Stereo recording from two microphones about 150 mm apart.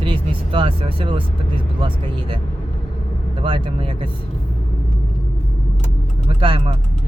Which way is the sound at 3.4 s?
35° right (ahead or behind).